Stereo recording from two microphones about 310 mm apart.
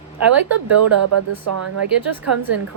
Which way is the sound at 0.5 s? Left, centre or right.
Right.